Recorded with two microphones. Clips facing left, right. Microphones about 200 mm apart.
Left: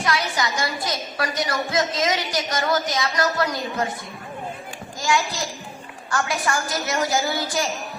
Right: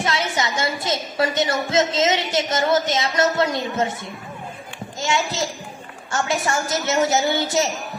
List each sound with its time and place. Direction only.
0.0 s a woman's voice: 25° right (ahead or behind)
4.9 s a woman's voice: 25° right (ahead or behind)